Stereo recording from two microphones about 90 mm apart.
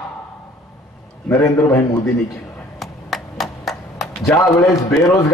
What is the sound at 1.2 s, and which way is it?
Speech, 35° left (ahead or behind).